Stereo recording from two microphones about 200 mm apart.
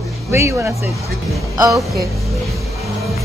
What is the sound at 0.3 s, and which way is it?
Speech, 10° right (ahead or behind).